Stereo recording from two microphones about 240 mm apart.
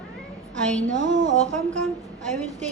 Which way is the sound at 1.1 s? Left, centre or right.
Right.